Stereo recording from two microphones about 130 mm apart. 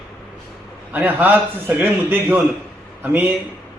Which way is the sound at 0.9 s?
15° right (ahead or behind).